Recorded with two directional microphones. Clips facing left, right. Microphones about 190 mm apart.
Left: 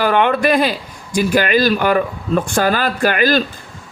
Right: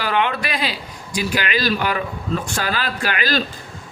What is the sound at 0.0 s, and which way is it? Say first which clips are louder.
A man's voice: left 7 dB; 50° left (ahead or behind).